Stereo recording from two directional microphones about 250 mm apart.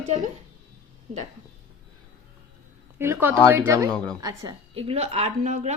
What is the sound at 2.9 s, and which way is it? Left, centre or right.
A woman's voice, centre.